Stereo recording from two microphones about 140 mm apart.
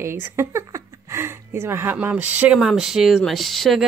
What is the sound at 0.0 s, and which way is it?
Speech, 20° right (ahead or behind).